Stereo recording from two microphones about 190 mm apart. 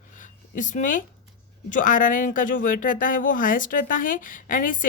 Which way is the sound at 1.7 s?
45° left (ahead or behind).